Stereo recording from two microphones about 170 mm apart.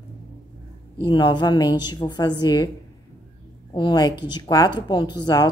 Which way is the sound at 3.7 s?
25° left (ahead or behind).